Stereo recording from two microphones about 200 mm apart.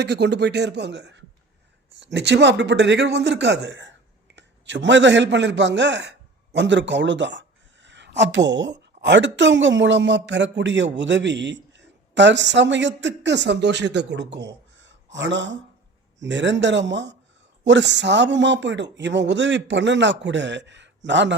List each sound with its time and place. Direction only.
0.0 s a man's voice: 60° right (ahead or behind)
14.3 s a sound: 60° right (ahead or behind)
16.2 s speech: 65° right (ahead or behind)